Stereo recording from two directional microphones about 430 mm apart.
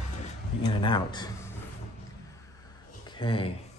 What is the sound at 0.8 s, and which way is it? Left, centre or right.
Speech, centre.